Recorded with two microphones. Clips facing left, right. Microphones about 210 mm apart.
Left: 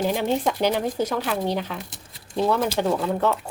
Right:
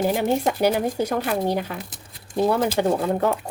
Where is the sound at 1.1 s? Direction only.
50° right (ahead or behind).